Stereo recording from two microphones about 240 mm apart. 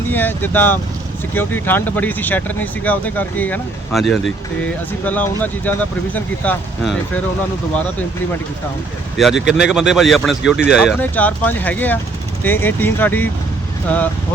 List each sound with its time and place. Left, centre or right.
0.1 s speech: centre
9.1 s speech: centre